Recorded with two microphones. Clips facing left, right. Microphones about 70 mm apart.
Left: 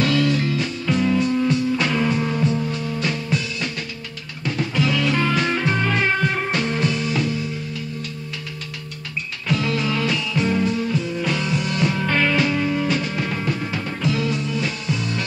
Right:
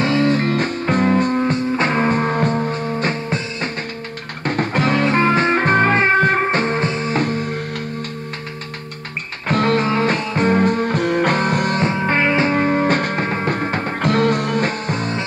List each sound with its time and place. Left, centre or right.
0.0 s music: right
4.5 s music: right
9.5 s music: right
11.8 s music: right